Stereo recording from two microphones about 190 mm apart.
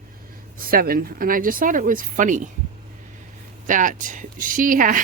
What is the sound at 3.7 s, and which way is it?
Speech, 45° right (ahead or behind).